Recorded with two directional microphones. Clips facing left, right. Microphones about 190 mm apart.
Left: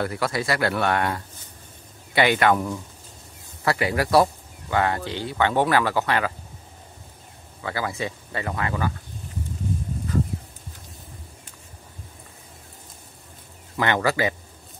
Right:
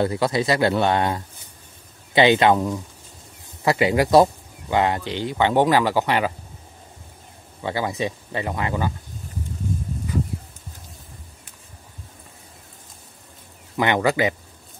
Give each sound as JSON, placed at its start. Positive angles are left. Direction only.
{"t": 0.0, "sound": "speech", "side_deg": -20}
{"t": 7.6, "sound": "speech", "side_deg": -20}
{"t": 13.7, "sound": "speech", "side_deg": -15}